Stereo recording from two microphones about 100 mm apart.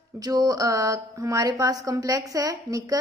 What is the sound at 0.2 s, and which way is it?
A woman's voice, 40° right (ahead or behind).